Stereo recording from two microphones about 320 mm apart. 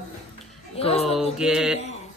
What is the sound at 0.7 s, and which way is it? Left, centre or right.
Speech, centre.